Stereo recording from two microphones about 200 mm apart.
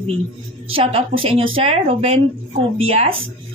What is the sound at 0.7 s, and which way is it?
A woman's voice, 30° right (ahead or behind).